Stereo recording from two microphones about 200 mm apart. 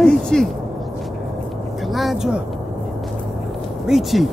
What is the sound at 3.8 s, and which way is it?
Speech, centre (ahead or behind).